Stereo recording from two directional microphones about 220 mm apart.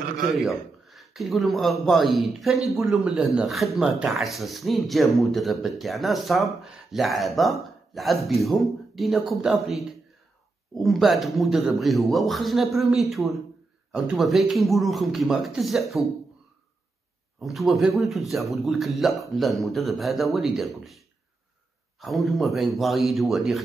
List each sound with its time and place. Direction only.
0.3 s speech: centre (ahead or behind)
17.4 s speech: centre (ahead or behind)
22.0 s speech: centre (ahead or behind)